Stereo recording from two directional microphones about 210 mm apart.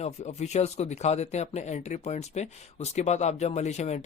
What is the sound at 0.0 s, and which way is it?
Speech, 30° left (ahead or behind).